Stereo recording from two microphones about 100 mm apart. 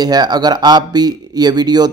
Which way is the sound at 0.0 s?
45° right (ahead or behind).